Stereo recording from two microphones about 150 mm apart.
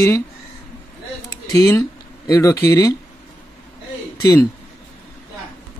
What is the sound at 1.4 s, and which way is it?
Speech, 25° left (ahead or behind).